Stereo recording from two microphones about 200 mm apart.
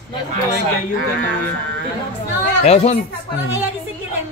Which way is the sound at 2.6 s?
30° left (ahead or behind).